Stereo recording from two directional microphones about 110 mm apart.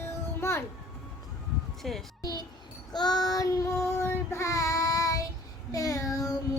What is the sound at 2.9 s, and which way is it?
Child singing, 40° left (ahead or behind).